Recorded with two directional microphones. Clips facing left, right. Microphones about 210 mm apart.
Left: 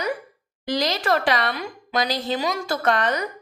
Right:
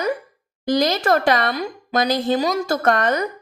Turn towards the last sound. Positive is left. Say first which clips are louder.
# right 4 dB
turn(degrees=-50)  # may be behind; listen again after turning